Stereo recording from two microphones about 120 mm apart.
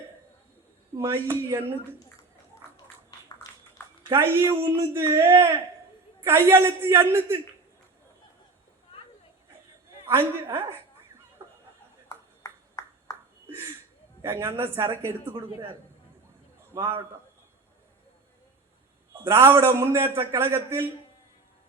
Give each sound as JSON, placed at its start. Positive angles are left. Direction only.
{"t": 0.9, "sound": "a man's voice", "side_deg": -20}
{"t": 4.1, "sound": "a man's voice", "side_deg": -20}
{"t": 10.1, "sound": "a man's voice", "side_deg": -20}
{"t": 12.0, "sound": "a sound", "side_deg": 30}
{"t": 14.2, "sound": "a man's voice", "side_deg": -25}
{"t": 16.7, "sound": "a man's voice", "side_deg": -25}
{"t": 19.1, "sound": "a man's voice", "side_deg": -20}